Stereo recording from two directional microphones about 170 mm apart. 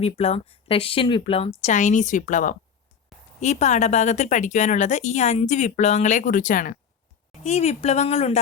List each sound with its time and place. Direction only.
0.0 s a woman's voice: 40° left (ahead or behind)
7.4 s speech: 40° left (ahead or behind)